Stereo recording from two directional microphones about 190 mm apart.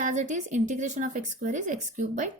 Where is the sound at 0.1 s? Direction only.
40° right (ahead or behind).